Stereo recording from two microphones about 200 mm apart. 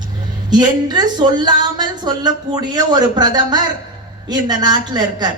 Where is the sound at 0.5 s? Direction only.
20° right (ahead or behind).